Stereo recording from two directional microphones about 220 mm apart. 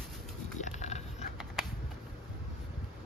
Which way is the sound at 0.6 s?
30° left (ahead or behind).